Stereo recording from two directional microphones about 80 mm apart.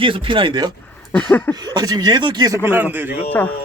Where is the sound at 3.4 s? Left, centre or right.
Left.